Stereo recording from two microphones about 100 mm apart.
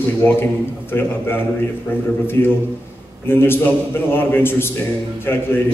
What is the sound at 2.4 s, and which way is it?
A man's voice, 30° left (ahead or behind).